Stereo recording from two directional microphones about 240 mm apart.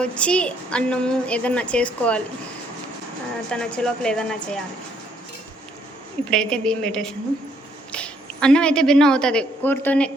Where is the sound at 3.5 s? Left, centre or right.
Centre.